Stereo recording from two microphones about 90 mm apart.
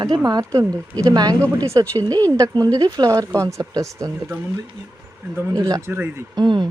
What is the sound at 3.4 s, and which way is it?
Speech, 35° right (ahead or behind).